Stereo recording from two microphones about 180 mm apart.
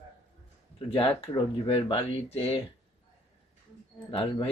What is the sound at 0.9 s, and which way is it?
Speech, 30° left (ahead or behind).